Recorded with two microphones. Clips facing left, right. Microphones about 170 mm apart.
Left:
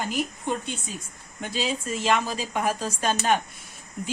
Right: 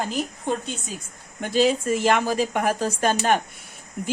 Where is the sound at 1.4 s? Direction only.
55° right (ahead or behind).